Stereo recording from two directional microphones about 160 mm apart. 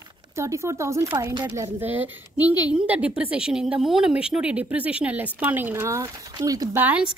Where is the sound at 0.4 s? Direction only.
20° right (ahead or behind).